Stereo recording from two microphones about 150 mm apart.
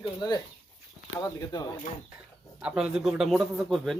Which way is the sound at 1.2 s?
25° left (ahead or behind).